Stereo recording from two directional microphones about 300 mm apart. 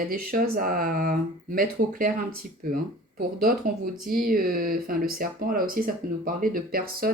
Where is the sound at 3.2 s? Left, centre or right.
Right.